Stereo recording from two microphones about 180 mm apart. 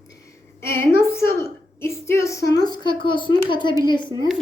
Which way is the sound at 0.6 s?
15° left (ahead or behind).